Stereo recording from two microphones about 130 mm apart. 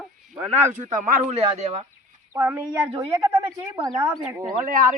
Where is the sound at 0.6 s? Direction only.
75° right (ahead or behind); by 1.9 s 55° right (ahead or behind).